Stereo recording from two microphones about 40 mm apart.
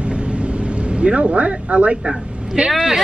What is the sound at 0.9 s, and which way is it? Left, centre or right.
Speech, right.